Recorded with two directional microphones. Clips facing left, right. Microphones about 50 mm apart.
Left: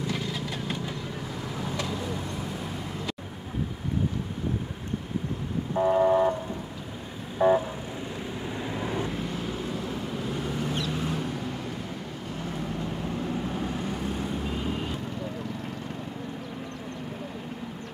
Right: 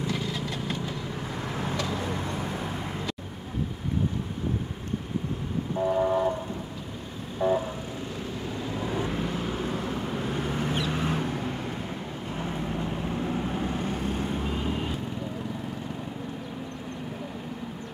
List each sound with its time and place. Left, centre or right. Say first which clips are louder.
0.1 s vehicle: right 1 dB; centre
1.5 s vehicle: right 2 dB; right
5.8 s vehicle: left 3 dB; left
7.3 s vehicle: left 3 dB; left
9.0 s vehicle: right 2 dB; right
9.7 s vehicle: right 2 dB; right
12.4 s vehicle: right 2 dB; right
13.8 s vehicle: right 1 dB; right
14.4 s vehicle: right 1 dB; centre